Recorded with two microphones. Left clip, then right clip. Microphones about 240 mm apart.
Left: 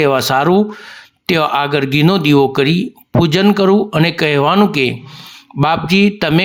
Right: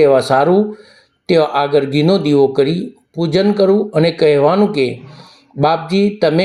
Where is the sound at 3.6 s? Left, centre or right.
Left.